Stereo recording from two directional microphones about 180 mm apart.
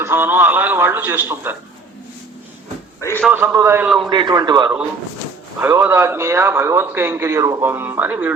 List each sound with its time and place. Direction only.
0.0 s a man's voice: 10° right (ahead or behind)
3.0 s a man's voice: 15° left (ahead or behind)
3.2 s a man's voice: 10° right (ahead or behind)
4.1 s a man's voice: 25° right (ahead or behind); by 8.3 s 10° right (ahead or behind)